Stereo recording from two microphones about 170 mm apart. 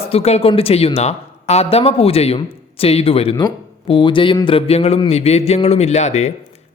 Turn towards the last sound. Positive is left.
turn(degrees=40)  # may be behind; listen again after turning